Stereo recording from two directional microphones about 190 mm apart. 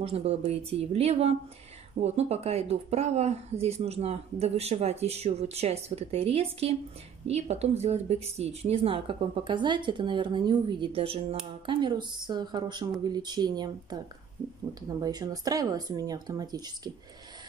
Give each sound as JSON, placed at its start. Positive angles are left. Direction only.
{"t": 0.0, "sound": "speech", "side_deg": -30}